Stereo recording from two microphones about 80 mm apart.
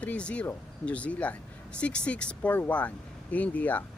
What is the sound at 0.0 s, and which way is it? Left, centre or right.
Speech, centre.